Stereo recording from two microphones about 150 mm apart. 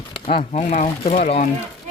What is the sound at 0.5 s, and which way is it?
Speech, 55° left (ahead or behind).